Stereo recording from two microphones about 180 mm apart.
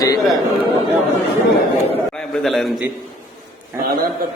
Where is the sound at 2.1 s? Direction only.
5° left (ahead or behind).